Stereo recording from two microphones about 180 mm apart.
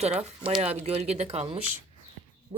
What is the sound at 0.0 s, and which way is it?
Speech, 35° right (ahead or behind).